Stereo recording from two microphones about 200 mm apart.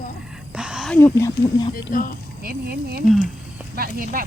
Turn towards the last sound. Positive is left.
turn(degrees=-45)  # may be behind; listen again after turning